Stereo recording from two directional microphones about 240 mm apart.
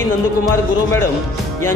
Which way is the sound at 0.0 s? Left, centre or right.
Centre.